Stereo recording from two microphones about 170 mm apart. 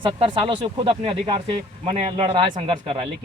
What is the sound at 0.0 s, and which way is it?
Speech, 30° right (ahead or behind).